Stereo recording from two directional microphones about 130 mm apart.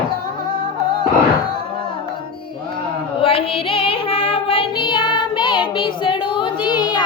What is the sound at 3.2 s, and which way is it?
Music, 45° left (ahead or behind).